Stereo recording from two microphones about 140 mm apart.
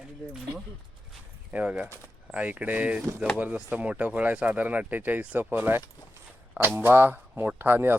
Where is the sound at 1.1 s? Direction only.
10° right (ahead or behind).